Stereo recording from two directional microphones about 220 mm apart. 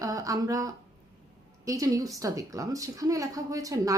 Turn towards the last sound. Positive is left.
turn(degrees=-15)  # may be behind; listen again after turning